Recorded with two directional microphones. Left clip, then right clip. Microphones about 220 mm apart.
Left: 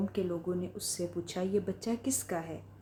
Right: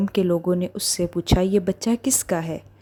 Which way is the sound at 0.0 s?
40° right (ahead or behind).